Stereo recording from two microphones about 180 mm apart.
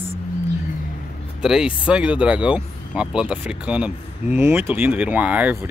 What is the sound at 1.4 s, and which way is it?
Speech, 5° right (ahead or behind).